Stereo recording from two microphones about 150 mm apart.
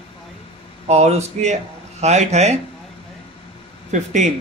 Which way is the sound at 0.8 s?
45° right (ahead or behind).